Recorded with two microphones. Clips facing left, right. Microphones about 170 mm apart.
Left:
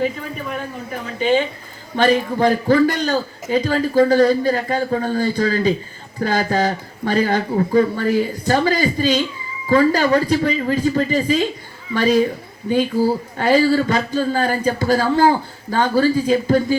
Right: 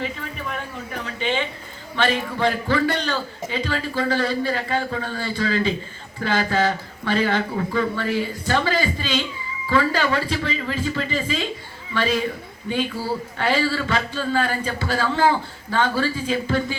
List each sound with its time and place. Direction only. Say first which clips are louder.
1.2 s a woman's voice: left 8 dB; 45° left (ahead or behind)